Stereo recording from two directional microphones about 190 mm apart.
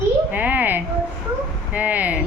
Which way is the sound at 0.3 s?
10° right (ahead or behind).